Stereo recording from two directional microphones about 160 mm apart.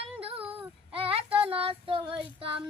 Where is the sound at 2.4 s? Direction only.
35° right (ahead or behind).